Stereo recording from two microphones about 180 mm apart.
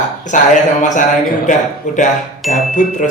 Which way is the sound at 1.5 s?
45° left (ahead or behind).